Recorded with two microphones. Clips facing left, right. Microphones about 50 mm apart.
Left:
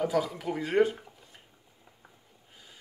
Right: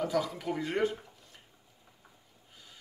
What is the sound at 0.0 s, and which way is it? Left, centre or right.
Speech, centre.